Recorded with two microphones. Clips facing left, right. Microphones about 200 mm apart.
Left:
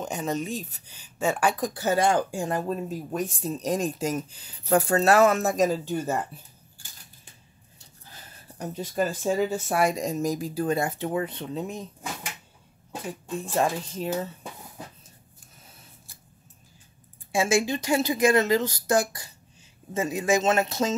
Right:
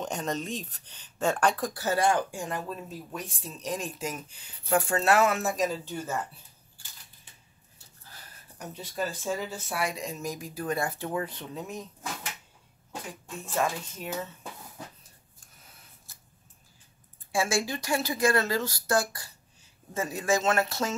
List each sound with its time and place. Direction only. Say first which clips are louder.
0.0 s speech: left 3 dB; 5° left (ahead or behind)
1.7 s speech: left 3 dB; 20° left (ahead or behind); by 6.1 s 45° left (ahead or behind)
8.9 s speech: left 6 dB; 50° left (ahead or behind); by 11.8 s 25° left (ahead or behind)
13.5 s speech: left 3 dB; 35° left (ahead or behind)
17.3 s speech: left 5 dB; 20° left (ahead or behind)